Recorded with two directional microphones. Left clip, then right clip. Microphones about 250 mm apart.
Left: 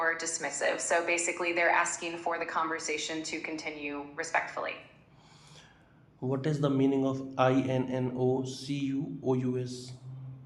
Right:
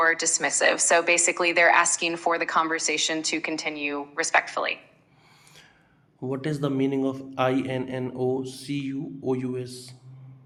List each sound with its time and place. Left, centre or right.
0.0 s a woman's voice: right
6.1 s a man's voice: right